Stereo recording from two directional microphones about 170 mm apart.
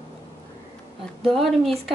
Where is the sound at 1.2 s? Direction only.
Centre (ahead or behind).